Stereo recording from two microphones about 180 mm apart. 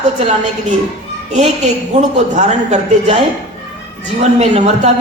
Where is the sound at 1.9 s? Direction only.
40° right (ahead or behind).